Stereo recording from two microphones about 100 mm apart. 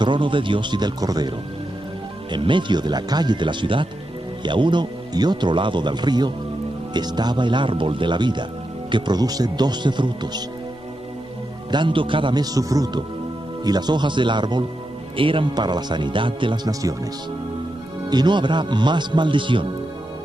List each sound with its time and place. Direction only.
0.0 s speech: 55° right (ahead or behind)
2.3 s speech: 55° right (ahead or behind)
11.7 s a man's voice: 55° right (ahead or behind)
12.5 s a man's voice: 35° right (ahead or behind)
15.1 s speech: 60° right (ahead or behind)
18.1 s speech: 50° right (ahead or behind)